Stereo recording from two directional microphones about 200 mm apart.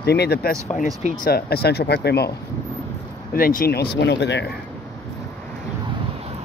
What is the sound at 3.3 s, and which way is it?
Speech, 45° left (ahead or behind).